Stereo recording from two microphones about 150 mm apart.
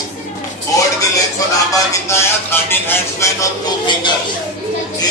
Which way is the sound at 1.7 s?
15° left (ahead or behind).